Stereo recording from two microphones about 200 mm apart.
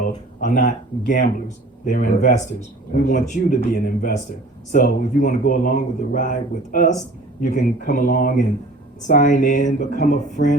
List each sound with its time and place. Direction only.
0.3 s speech: 40° left (ahead or behind)